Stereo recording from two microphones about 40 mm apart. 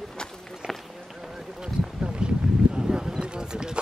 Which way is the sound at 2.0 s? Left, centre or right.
Right.